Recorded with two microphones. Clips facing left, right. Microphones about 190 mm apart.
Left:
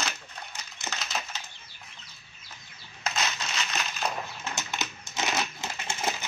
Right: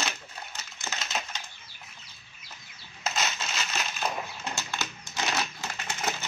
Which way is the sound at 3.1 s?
5° right (ahead or behind).